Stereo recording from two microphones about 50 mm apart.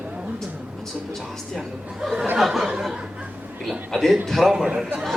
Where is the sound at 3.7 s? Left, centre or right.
Centre.